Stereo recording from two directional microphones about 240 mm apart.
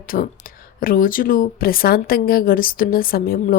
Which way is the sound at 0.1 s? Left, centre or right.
Left.